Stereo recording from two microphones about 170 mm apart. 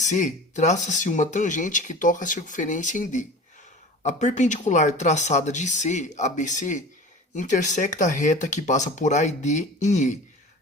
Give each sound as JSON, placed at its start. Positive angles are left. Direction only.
{"t": 0.0, "sound": "speech", "side_deg": 45}